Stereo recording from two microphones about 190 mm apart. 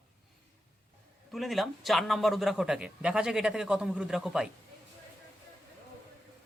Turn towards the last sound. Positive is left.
turn(degrees=-5)  # may be behind; listen again after turning